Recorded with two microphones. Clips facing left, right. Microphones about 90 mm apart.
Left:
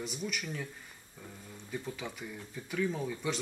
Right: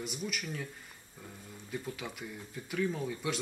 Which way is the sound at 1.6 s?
Centre (ahead or behind).